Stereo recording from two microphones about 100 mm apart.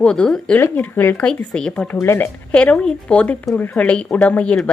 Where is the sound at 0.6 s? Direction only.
20° left (ahead or behind).